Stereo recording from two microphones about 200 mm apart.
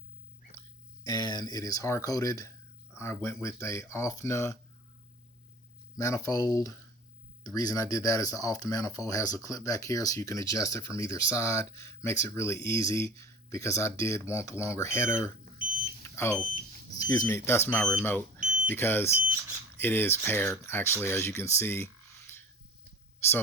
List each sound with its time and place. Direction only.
1.0 s speech: 20° left (ahead or behind)
6.0 s speech: 15° left (ahead or behind)
16.0 s smoke detector: 15° left (ahead or behind)
17.0 s speech: 15° left (ahead or behind)